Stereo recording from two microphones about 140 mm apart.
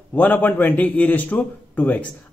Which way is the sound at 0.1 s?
10° left (ahead or behind).